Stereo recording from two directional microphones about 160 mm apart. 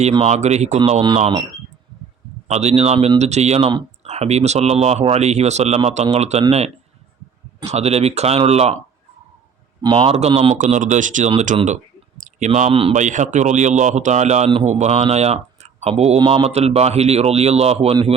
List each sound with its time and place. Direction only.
0.1 s a man's voice: 40° right (ahead or behind)
2.5 s a man's voice: 45° right (ahead or behind)
7.6 s speech: 45° right (ahead or behind)
9.8 s a man's voice: 30° right (ahead or behind)